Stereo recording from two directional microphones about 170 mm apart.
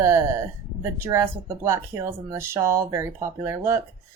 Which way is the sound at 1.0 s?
15° right (ahead or behind).